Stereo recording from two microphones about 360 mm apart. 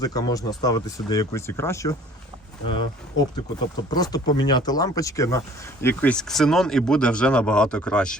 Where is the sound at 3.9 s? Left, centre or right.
Centre.